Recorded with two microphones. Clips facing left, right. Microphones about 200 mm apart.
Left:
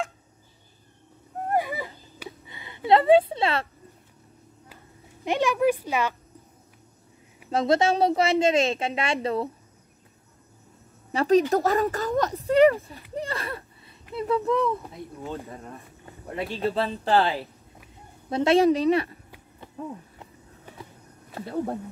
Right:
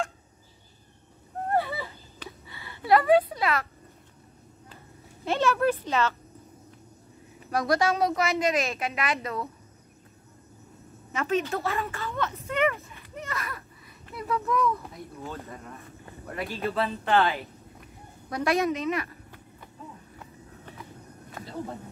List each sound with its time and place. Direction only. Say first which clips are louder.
1.5 s a sound: left 1 dB; 15° left (ahead or behind)
5.2 s speech: left 2 dB; 15° left (ahead or behind)
7.4 s a woman's voice: left 3 dB; 25° left (ahead or behind)
11.1 s a woman's voice: left 8 dB; 35° left (ahead or behind)
16.3 s speech: left 4 dB; 25° left (ahead or behind)
19.8 s speech: left 10 dB; 50° left (ahead or behind)
21.4 s a sound: left 6 dB; 30° left (ahead or behind)